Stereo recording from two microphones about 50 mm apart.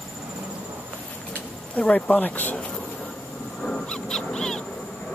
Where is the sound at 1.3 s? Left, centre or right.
Left.